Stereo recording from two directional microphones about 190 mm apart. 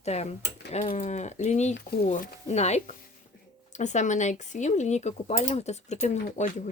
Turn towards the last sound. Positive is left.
turn(degrees=35)  # may be behind; listen again after turning